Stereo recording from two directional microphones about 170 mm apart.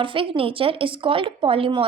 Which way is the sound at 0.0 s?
30° right (ahead or behind).